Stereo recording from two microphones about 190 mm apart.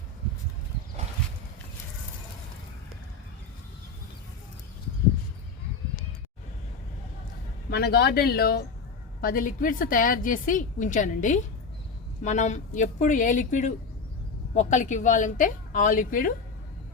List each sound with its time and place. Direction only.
7.7 s a woman's voice: 55° left (ahead or behind)